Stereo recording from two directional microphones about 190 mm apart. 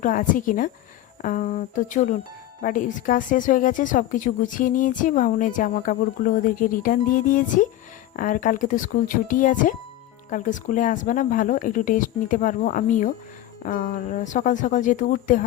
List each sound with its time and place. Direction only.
0.0 s a woman's voice: 45° left (ahead or behind)